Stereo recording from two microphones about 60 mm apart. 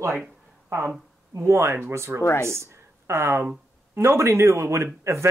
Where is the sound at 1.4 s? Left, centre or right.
Right.